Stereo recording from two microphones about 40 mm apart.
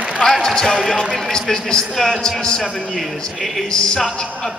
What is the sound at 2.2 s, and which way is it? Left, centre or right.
Speech, left.